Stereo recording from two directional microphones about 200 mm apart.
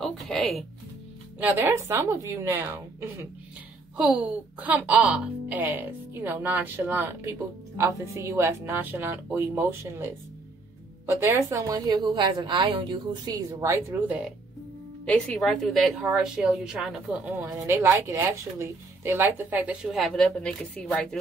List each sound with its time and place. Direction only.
0.0 s music: centre (ahead or behind)
1.4 s speech: 10° right (ahead or behind)
11.1 s speech: 15° right (ahead or behind)
15.0 s a woman's voice: 5° left (ahead or behind)